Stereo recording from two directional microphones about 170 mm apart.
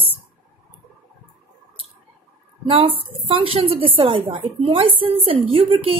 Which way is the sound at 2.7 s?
30° right (ahead or behind).